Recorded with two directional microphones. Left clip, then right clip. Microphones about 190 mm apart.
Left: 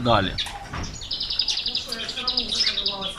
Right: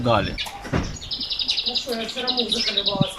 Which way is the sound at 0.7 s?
55° right (ahead or behind).